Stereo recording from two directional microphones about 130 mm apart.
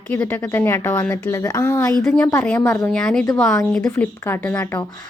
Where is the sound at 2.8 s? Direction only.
10° left (ahead or behind).